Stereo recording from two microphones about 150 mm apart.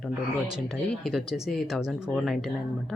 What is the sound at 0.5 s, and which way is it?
Speech, centre (ahead or behind).